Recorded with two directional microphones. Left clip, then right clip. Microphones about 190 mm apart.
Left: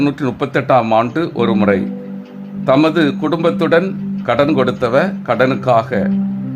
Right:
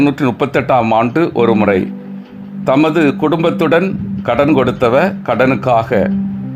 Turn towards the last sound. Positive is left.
turn(degrees=-20)  # may be behind; listen again after turning